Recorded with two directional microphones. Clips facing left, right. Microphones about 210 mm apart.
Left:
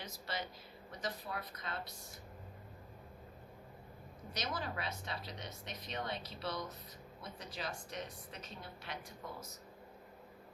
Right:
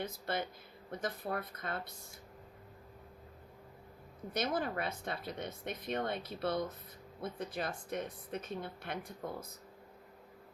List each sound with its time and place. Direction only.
0.0 s speech: 55° right (ahead or behind)
4.4 s speech: 55° right (ahead or behind)